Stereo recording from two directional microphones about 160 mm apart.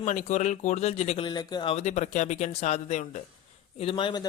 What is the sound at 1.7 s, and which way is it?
Speech, 45° left (ahead or behind).